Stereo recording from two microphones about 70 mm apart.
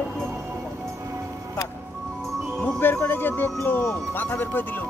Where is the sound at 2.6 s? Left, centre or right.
Left.